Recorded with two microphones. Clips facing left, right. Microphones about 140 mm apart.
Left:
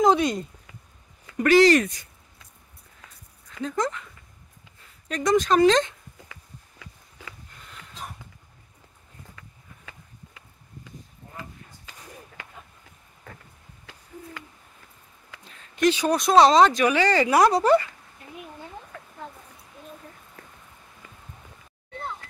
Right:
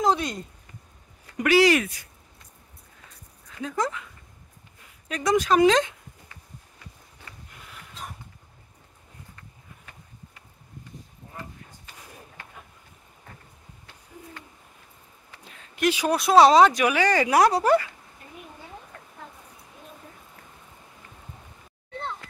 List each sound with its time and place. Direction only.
0.0 s speech: 10° left (ahead or behind)
1.4 s speech: 10° right (ahead or behind)
3.6 s speech: 5° right (ahead or behind)
5.0 s speech: 10° right (ahead or behind)
6.8 s a sound: 90° left
9.9 s a sound: 90° left
12.4 s a sound: 90° left
13.9 s hoot: 90° left
15.7 s speech: 10° right (ahead or behind)